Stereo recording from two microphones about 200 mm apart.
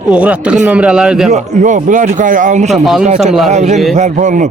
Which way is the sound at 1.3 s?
40° right (ahead or behind).